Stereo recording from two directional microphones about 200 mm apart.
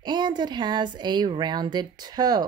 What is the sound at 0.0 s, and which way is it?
Speech, 20° right (ahead or behind).